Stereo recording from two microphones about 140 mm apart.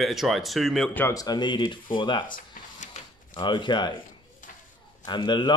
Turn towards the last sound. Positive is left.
turn(degrees=35)  # may be behind; listen again after turning